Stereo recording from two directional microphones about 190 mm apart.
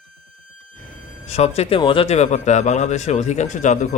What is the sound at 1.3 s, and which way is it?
Speech, 35° left (ahead or behind).